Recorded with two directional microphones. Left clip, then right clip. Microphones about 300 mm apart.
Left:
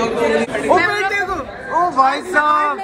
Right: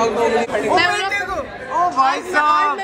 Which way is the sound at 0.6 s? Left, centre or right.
Centre.